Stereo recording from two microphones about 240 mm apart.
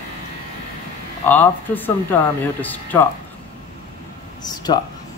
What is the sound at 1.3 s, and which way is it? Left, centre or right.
Speech, centre.